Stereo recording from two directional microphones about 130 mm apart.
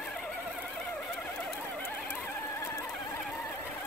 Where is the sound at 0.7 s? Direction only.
10° left (ahead or behind).